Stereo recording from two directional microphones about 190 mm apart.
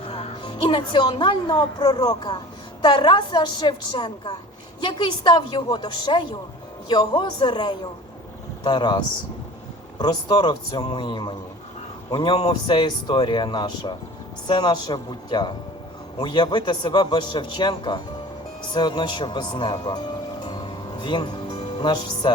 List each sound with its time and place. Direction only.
0.1 s a woman's voice: 30° left (ahead or behind)
21.0 s music: 25° left (ahead or behind)